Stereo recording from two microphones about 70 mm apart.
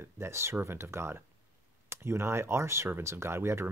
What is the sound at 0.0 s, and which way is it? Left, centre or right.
Speech, right.